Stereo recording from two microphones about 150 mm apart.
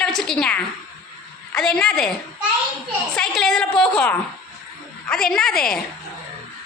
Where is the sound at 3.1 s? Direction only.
5° left (ahead or behind).